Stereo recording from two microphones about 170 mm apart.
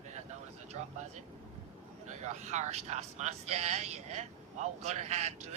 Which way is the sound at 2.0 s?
45° right (ahead or behind).